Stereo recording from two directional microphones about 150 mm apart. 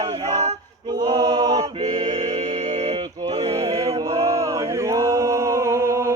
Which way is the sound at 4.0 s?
20° right (ahead or behind).